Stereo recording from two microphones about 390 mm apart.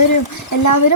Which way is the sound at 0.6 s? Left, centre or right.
Left.